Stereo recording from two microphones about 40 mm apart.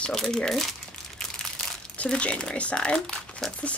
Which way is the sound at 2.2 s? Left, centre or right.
Left.